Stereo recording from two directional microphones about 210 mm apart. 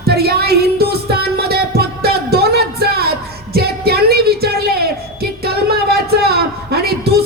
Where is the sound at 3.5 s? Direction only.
50° right (ahead or behind).